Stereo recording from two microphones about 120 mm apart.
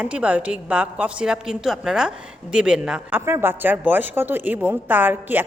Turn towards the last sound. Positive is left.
turn(degrees=-15)  # may be behind; listen again after turning